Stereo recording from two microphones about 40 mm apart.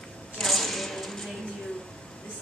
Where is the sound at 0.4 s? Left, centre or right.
Centre.